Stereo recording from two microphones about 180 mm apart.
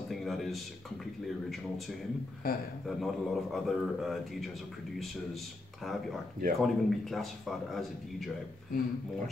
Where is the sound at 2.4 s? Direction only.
55° left (ahead or behind).